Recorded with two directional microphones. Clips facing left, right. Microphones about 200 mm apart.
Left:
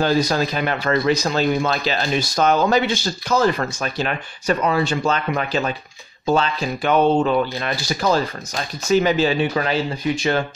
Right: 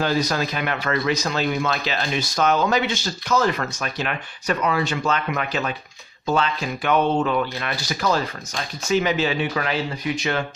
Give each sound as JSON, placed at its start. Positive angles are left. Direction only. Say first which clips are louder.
{"t": 0.0, "sound": "speech", "louder": "left 4 dB", "side_deg": 30}